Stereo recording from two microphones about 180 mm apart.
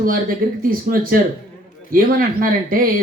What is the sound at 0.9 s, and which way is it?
Speech, 50° right (ahead or behind).